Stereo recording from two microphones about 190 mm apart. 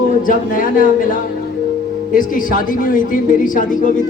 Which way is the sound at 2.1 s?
45° left (ahead or behind).